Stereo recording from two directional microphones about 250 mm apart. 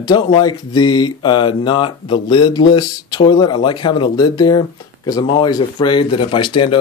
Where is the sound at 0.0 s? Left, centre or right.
Centre.